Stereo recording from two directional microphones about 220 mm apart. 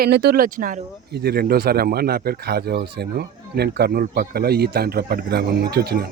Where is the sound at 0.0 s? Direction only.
50° right (ahead or behind).